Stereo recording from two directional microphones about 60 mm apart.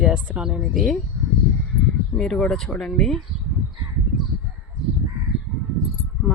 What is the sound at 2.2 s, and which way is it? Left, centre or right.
Speech, centre.